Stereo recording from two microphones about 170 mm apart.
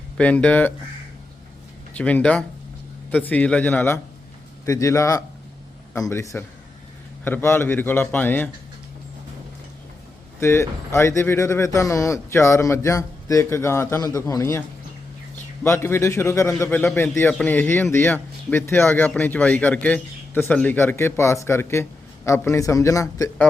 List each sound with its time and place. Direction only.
0.2 s a man's voice: 10° left (ahead or behind)
1.9 s a man's voice: 10° left (ahead or behind)
10.4 s a man's voice: 15° left (ahead or behind)
15.6 s a man's voice: 15° left (ahead or behind)
16.6 s a man's voice: 5° left (ahead or behind)
16.9 s a man's voice: 15° left (ahead or behind)